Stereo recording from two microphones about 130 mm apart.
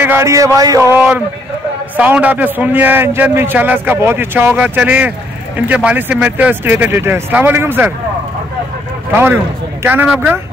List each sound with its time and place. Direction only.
0.0 s a man's voice: 20° right (ahead or behind)
0.9 s a man's voice: 10° right (ahead or behind)
9.1 s a man's voice: 15° right (ahead or behind)